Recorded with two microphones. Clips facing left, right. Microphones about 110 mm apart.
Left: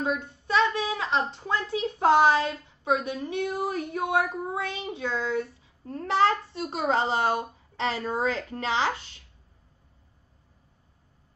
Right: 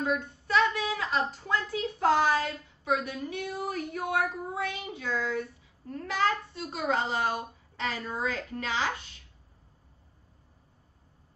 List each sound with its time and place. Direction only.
0.0 s a woman's voice: 25° left (ahead or behind)